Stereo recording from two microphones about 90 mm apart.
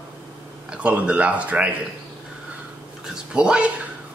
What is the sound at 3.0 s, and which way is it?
Speech, 5° right (ahead or behind).